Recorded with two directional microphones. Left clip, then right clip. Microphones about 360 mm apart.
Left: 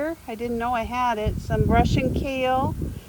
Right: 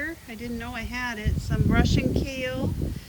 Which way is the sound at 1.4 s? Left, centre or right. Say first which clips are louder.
Left 5 dB; left.